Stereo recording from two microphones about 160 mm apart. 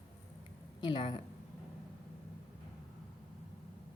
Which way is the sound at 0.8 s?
30° left (ahead or behind).